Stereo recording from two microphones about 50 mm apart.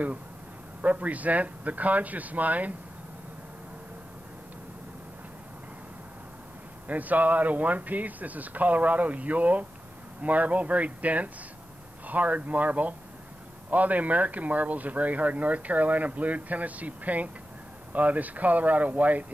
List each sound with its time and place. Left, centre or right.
0.8 s speech: right
6.9 s speech: right